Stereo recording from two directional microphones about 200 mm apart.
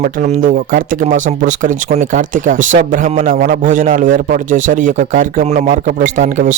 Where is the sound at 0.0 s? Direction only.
40° right (ahead or behind).